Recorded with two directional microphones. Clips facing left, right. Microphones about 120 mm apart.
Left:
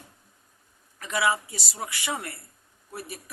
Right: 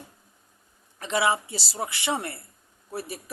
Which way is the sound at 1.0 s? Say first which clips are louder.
Right 2 dB; 25° right (ahead or behind).